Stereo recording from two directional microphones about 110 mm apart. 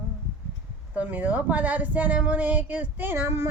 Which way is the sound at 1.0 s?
15° right (ahead or behind).